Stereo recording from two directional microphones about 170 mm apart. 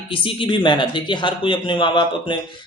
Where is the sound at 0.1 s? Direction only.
30° left (ahead or behind).